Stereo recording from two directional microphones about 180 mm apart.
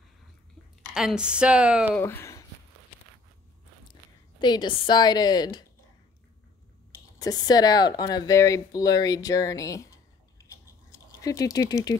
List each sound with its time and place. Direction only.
0.8 s speech: centre (ahead or behind)
2.0 s speech: 10° left (ahead or behind)
4.4 s speech: 25° left (ahead or behind)
7.2 s speech: 20° left (ahead or behind)
10.5 s patter: 20° left (ahead or behind)